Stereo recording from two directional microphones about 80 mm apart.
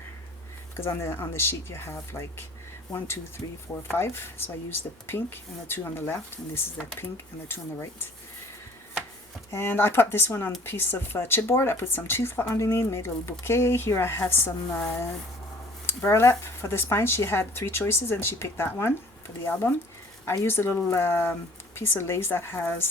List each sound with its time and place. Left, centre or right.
0.8 s speech: left
9.5 s speech: left
12.5 s speech: left
16.0 s speech: left